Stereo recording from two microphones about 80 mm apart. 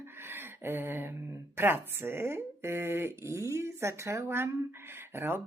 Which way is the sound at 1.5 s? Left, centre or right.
Right.